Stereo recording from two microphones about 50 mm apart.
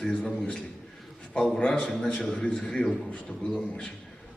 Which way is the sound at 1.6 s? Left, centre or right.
Centre.